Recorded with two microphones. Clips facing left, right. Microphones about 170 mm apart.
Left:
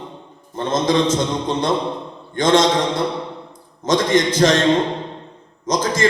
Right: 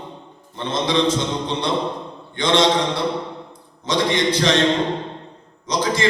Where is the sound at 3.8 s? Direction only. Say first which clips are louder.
Left 3 dB; 45° left (ahead or behind).